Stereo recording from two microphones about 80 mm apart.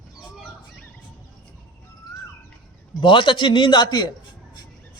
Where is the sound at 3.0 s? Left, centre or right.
Left.